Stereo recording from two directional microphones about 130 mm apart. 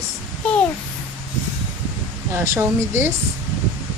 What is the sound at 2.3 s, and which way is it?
Speech, 20° right (ahead or behind).